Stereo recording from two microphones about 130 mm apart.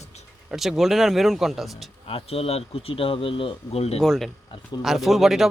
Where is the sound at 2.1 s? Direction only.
50° left (ahead or behind).